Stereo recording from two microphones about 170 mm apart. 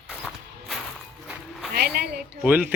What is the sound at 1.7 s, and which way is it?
Speech, 65° right (ahead or behind).